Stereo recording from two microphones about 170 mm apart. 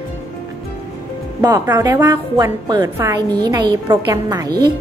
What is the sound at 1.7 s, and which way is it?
A woman's voice, 15° right (ahead or behind).